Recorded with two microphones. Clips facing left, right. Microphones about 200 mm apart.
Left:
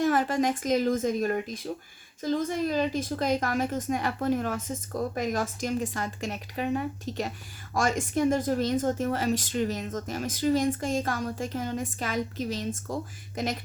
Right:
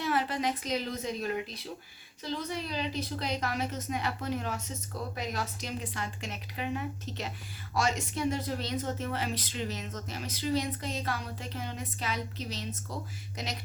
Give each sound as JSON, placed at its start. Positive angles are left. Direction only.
{"t": 0.0, "sound": "a woman's voice", "side_deg": 45}